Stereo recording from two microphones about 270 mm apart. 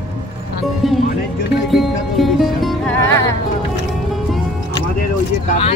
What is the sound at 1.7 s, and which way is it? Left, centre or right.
Music, centre.